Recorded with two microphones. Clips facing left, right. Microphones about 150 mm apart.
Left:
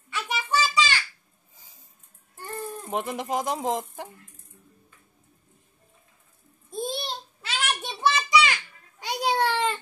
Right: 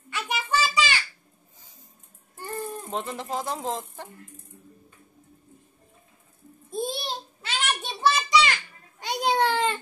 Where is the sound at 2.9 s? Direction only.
15° left (ahead or behind).